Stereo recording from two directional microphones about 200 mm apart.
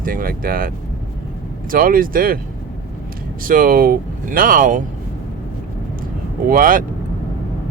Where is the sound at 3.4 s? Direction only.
45° right (ahead or behind).